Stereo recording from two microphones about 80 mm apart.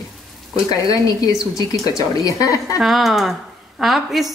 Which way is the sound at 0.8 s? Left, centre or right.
Left.